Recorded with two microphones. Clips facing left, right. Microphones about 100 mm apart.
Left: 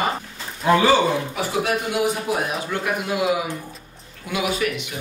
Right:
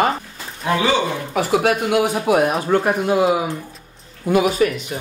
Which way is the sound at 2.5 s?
40° right (ahead or behind).